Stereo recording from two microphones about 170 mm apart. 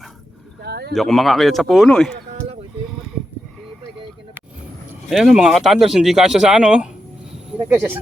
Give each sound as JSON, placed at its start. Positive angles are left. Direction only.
{"t": 0.6, "sound": "speech", "side_deg": -70}
{"t": 0.9, "sound": "a man's voice", "side_deg": 0}
{"t": 5.0, "sound": "a man's voice", "side_deg": 0}